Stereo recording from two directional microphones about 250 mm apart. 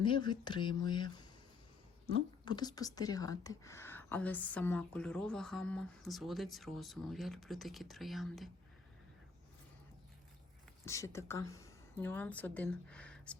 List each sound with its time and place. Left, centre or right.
0.0 s speech: centre
2.4 s speech: centre
10.8 s a woman's voice: centre